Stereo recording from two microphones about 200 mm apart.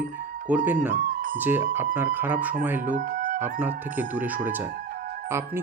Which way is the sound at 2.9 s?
45° right (ahead or behind).